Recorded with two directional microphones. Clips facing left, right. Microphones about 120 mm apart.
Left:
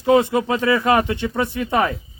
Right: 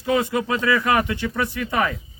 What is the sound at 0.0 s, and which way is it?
A man's voice, 25° left (ahead or behind).